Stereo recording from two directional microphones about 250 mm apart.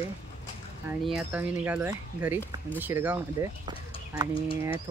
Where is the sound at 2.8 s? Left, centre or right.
Centre.